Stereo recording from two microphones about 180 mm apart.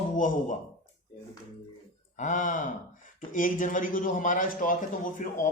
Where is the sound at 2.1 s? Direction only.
45° left (ahead or behind).